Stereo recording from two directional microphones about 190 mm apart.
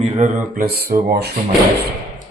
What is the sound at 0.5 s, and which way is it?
Speech, 55° right (ahead or behind).